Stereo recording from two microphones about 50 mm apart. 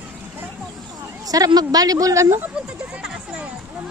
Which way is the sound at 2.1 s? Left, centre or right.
Right.